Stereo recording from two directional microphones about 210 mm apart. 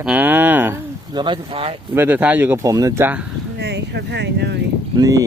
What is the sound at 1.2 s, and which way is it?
Speech, 25° right (ahead or behind).